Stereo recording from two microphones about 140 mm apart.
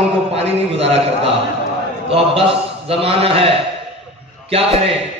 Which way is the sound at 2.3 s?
40° right (ahead or behind).